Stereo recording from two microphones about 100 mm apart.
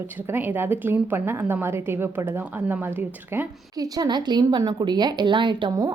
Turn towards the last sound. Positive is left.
turn(degrees=-50)  # may be behind; listen again after turning